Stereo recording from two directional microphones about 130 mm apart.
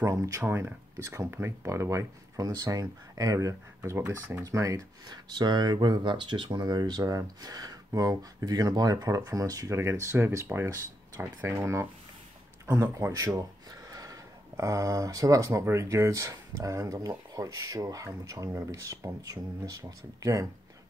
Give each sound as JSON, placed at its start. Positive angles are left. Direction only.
{"t": 0.0, "sound": "speech", "side_deg": -25}